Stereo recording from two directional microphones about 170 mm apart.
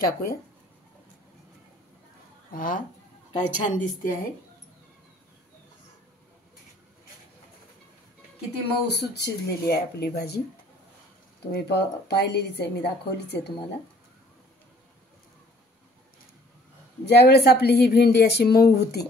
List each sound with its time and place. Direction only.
0.0 s speech: 60° left (ahead or behind)
2.5 s a woman's voice: 50° left (ahead or behind)
8.8 s a woman's voice: 75° left (ahead or behind)
11.5 s a woman's voice: 75° left (ahead or behind)
17.0 s a woman's voice: 75° left (ahead or behind)